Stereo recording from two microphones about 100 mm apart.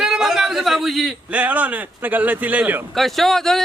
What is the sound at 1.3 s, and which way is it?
Speech, 15° right (ahead or behind).